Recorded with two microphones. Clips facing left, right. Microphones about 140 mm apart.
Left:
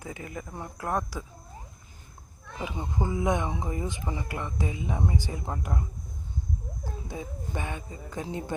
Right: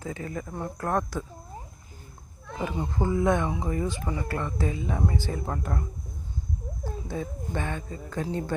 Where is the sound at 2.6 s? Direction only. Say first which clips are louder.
Right 3 dB; 15° left (ahead or behind).